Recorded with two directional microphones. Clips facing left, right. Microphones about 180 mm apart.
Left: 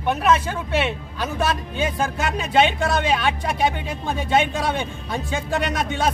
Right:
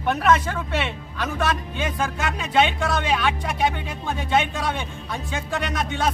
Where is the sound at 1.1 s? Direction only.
30° left (ahead or behind).